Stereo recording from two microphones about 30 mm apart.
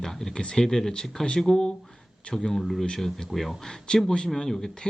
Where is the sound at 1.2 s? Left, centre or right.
Left.